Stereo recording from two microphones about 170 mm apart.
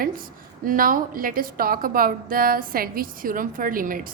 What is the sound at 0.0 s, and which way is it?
A woman's voice, 55° right (ahead or behind).